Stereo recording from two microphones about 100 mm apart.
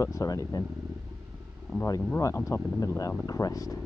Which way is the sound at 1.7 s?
Centre (ahead or behind).